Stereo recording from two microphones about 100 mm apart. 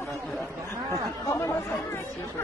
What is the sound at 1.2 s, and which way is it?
Speech, 30° left (ahead or behind).